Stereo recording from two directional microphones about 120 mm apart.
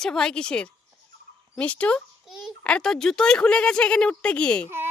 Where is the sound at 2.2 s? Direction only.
5° right (ahead or behind).